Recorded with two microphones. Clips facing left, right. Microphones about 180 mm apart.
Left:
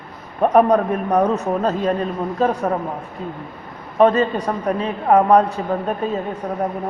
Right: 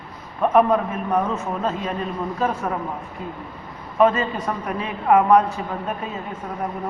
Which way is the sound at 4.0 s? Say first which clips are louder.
Left 4 dB; 35° left (ahead or behind).